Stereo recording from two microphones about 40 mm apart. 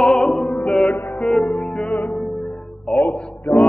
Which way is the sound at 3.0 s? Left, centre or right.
Left.